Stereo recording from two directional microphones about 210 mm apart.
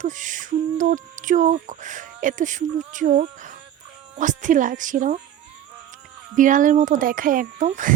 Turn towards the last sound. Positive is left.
turn(degrees=-40)  # may be behind; listen again after turning